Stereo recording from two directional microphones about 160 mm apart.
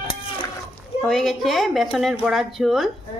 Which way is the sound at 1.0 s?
Centre (ahead or behind).